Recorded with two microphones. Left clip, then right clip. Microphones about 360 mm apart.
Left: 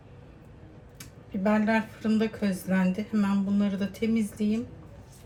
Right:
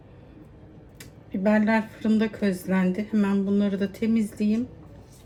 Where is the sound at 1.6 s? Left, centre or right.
Left.